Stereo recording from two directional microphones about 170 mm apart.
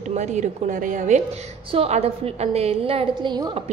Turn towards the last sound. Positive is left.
turn(degrees=-25)  # may be behind; listen again after turning